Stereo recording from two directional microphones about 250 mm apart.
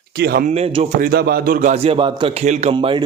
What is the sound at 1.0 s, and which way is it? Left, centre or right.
A man's voice, right.